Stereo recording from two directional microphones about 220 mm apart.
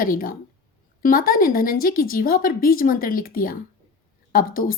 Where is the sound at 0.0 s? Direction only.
40° left (ahead or behind).